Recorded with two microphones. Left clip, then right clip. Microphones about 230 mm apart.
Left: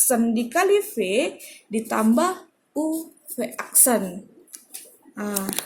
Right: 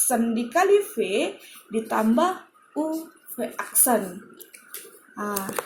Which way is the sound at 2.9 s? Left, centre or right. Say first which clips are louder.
Left 2 dB; left.